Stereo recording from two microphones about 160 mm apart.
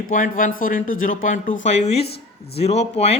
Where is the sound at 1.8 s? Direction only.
40° left (ahead or behind).